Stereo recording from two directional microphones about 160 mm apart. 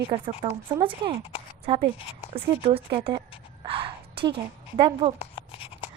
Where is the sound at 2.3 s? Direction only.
35° right (ahead or behind).